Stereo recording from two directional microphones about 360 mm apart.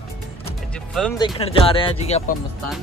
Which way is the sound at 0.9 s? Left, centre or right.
Centre.